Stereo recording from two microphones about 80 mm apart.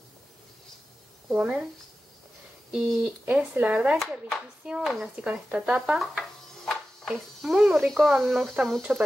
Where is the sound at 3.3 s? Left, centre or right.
Centre.